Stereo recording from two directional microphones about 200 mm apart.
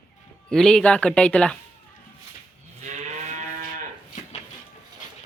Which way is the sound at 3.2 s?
35° right (ahead or behind).